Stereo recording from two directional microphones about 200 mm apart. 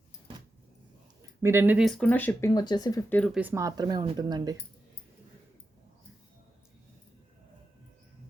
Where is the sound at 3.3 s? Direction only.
10° right (ahead or behind).